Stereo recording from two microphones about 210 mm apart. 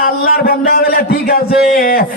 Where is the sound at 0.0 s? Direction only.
45° left (ahead or behind).